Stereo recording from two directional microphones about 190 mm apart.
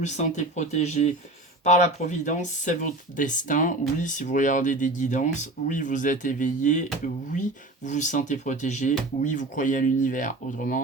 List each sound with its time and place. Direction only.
0.0 s speech: 40° left (ahead or behind)
7.9 s speech: 40° left (ahead or behind)